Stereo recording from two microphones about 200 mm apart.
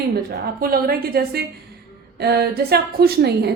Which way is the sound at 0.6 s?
50° right (ahead or behind).